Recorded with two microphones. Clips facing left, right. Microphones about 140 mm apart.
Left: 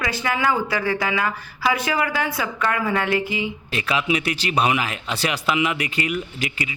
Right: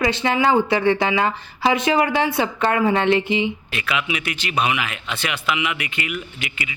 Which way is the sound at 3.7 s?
35° left (ahead or behind).